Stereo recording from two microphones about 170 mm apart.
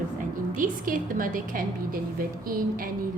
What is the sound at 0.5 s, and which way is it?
A woman's voice, 50° right (ahead or behind).